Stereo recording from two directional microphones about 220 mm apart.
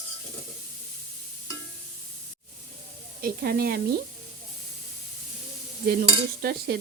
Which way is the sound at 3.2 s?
45° right (ahead or behind).